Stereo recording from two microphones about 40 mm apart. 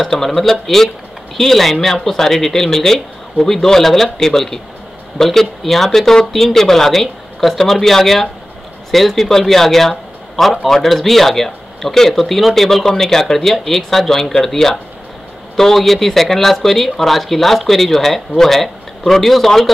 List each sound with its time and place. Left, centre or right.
0.0 s speech: centre